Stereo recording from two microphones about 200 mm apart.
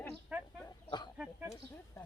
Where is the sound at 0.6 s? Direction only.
20° left (ahead or behind).